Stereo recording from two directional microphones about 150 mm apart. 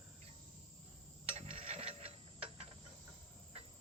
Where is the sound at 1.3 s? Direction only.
40° right (ahead or behind).